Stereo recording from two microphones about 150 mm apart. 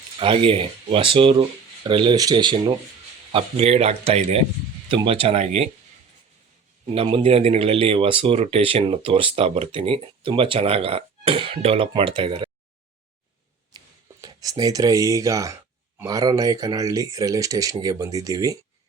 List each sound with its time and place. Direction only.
0.2 s speech: 35° right (ahead or behind)
3.3 s speech: 45° right (ahead or behind)
6.8 s speech: 40° right (ahead or behind)
13.7 s speech: 25° right (ahead or behind)